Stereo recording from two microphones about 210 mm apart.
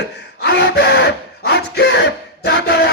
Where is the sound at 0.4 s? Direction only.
50° left (ahead or behind).